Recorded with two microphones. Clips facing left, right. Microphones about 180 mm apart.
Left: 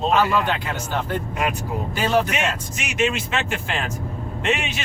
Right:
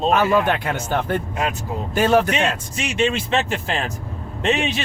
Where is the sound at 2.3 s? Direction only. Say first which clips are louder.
Right 3 dB; 30° right (ahead or behind).